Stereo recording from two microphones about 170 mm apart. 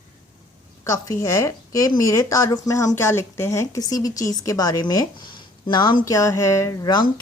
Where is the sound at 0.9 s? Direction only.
20° left (ahead or behind).